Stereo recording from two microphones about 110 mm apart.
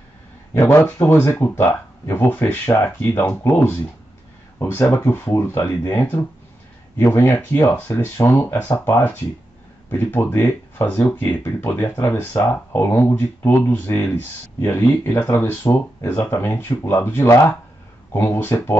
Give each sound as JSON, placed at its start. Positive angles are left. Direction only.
{"t": 0.6, "sound": "speech", "side_deg": 20}